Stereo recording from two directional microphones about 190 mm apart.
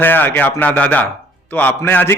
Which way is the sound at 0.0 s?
10° left (ahead or behind).